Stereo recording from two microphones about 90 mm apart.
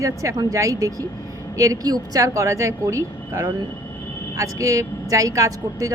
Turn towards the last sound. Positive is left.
turn(degrees=-40)  # may be behind; listen again after turning